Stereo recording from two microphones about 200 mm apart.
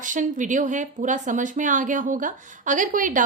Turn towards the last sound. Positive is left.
turn(degrees=-40)  # may be behind; listen again after turning